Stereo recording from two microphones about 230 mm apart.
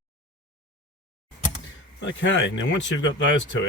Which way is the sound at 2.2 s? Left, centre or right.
Left.